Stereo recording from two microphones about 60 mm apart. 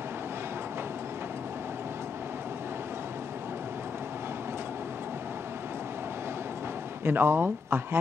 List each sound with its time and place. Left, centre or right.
7.1 s speech: right